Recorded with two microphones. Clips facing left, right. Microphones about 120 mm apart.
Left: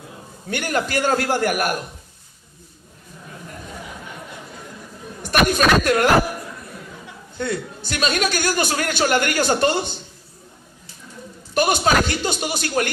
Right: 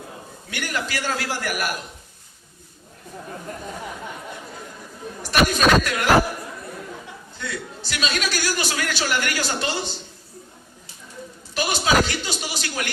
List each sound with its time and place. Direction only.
0.4 s a man's voice: 50° left (ahead or behind)
5.2 s speech: 50° left (ahead or behind)
7.3 s a man's voice: 50° left (ahead or behind)
11.5 s a sound: 50° left (ahead or behind)